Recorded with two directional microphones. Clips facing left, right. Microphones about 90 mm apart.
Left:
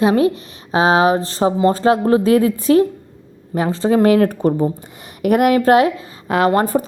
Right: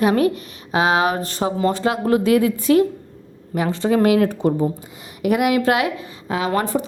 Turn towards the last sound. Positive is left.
turn(degrees=45)  # may be behind; listen again after turning